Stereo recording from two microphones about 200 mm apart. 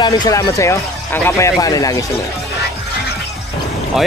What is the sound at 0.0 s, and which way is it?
A man's voice, 15° left (ahead or behind).